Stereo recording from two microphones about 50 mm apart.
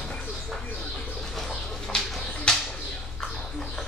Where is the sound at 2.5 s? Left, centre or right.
Centre.